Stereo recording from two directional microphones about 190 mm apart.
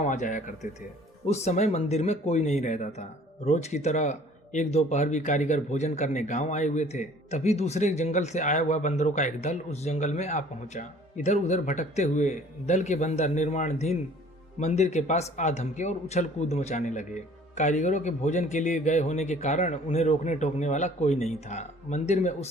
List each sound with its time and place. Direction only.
0.0 s speech: 40° left (ahead or behind)